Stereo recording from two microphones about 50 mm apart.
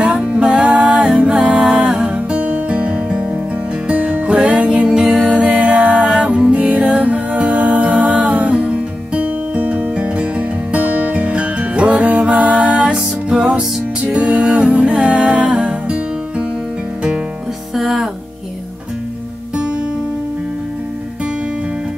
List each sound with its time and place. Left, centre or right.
0.0 s music: right
5.0 s music: centre
5.3 s music: right
14.0 s music: right
17.7 s music: centre